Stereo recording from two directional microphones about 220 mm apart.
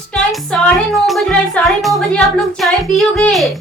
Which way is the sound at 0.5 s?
5° left (ahead or behind).